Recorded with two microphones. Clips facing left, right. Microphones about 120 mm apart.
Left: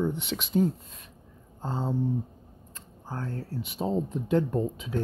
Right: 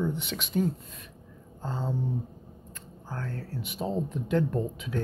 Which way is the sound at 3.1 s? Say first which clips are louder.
Left 2 dB; 25° left (ahead or behind).